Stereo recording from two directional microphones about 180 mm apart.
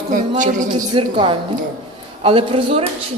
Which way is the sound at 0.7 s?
25° right (ahead or behind).